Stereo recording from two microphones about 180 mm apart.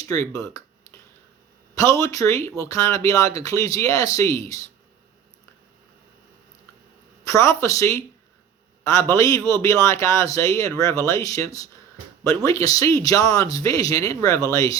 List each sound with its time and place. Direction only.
0.0 s speech: 20° left (ahead or behind)
1.7 s speech: 15° left (ahead or behind)
7.3 s speech: 15° left (ahead or behind)